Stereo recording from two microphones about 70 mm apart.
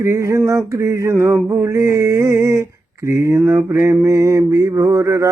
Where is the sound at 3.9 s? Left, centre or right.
Right.